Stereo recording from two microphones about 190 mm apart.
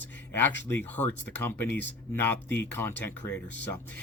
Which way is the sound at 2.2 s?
10° left (ahead or behind).